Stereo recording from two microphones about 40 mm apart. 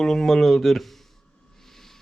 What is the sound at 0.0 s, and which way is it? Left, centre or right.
Speech, centre.